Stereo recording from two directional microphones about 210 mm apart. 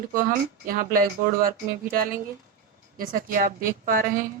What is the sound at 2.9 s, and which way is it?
Speech, 40° right (ahead or behind).